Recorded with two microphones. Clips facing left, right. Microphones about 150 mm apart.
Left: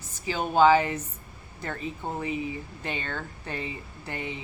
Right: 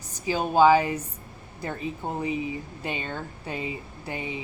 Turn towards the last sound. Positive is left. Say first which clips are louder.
# right 2 dB
turn(degrees=-15)  # may be behind; listen again after turning